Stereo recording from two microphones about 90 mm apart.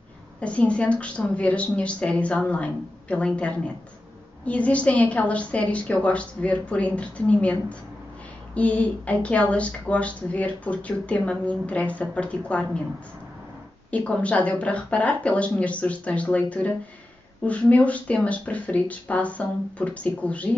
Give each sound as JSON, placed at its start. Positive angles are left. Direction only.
{"t": 0.4, "sound": "a woman's voice", "side_deg": 15}
{"t": 8.5, "sound": "a woman's voice", "side_deg": 15}
{"t": 13.8, "sound": "a woman's voice", "side_deg": 15}